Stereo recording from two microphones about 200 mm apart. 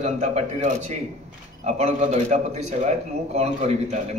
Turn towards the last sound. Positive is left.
turn(degrees=-35)  # may be behind; listen again after turning